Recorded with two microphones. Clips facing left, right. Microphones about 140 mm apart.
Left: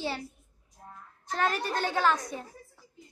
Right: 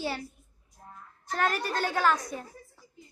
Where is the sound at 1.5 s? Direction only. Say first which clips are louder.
Even; 15° left (ahead or behind).